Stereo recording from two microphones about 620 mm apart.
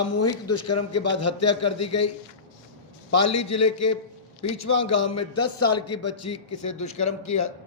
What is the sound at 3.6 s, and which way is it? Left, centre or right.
A man's voice, left.